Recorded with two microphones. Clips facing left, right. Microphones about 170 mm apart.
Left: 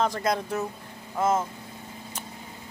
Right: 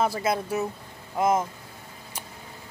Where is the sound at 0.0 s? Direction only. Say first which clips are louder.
Right 1 dB; 5° right (ahead or behind).